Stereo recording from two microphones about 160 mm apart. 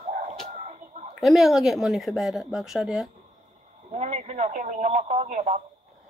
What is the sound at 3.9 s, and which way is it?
Speech, 50° right (ahead or behind).